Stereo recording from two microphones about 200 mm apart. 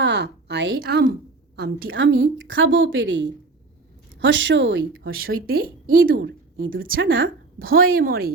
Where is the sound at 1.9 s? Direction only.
70° right (ahead or behind).